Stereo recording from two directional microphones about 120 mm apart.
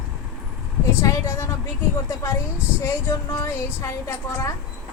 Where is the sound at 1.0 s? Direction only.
25° left (ahead or behind).